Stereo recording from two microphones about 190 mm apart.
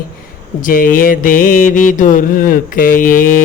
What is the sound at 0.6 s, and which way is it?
Mantra, 45° left (ahead or behind).